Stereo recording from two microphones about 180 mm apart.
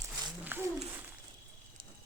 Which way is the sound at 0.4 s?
10° right (ahead or behind).